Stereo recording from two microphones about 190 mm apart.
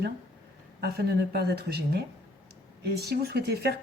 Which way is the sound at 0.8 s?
55° right (ahead or behind).